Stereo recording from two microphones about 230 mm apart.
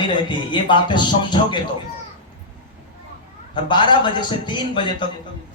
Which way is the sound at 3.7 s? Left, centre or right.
Centre.